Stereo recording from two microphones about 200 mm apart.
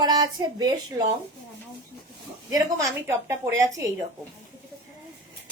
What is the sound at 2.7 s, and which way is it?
Speech, 15° right (ahead or behind).